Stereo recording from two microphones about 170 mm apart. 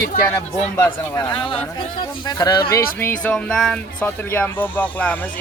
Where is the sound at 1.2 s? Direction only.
30° left (ahead or behind).